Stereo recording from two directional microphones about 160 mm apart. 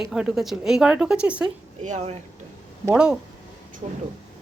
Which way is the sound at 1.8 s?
50° right (ahead or behind).